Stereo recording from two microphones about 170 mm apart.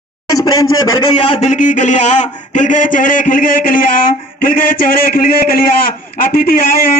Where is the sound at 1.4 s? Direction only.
45° left (ahead or behind).